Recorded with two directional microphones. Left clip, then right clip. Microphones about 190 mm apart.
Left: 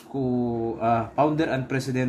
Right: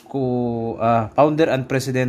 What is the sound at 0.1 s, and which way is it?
Speech, 55° right (ahead or behind).